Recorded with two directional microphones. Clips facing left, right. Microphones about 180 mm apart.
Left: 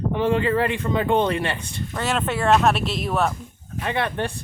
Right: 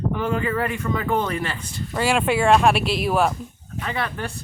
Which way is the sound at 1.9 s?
10° right (ahead or behind).